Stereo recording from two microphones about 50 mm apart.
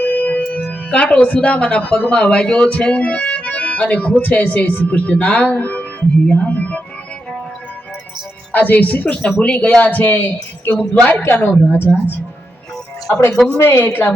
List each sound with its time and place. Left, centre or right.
0.0 s music: left
0.9 s speech: left
6.2 s speech: left
8.5 s speech: left
11.2 s a woman's voice: left
11.9 s speech: left
13.6 s a woman's voice: left